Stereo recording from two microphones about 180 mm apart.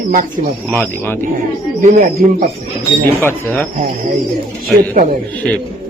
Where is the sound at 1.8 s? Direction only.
50° right (ahead or behind).